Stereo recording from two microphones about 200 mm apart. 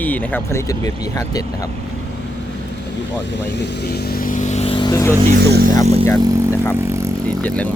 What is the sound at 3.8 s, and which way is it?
Vehicle, 55° left (ahead or behind).